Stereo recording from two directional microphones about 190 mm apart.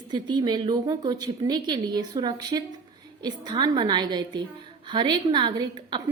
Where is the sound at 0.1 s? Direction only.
25° right (ahead or behind).